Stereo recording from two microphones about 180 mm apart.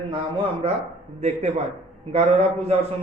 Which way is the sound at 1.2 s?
35° right (ahead or behind).